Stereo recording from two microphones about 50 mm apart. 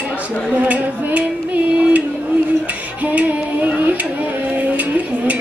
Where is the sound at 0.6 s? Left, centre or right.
Right.